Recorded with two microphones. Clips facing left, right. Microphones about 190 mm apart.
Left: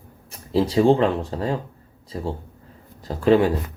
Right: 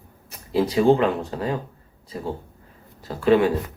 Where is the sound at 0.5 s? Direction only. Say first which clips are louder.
Left 1 dB; 30° left (ahead or behind).